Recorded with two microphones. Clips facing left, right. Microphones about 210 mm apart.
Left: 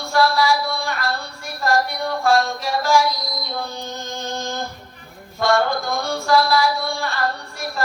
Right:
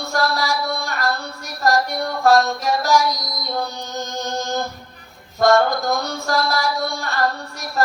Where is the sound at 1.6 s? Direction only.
40° right (ahead or behind).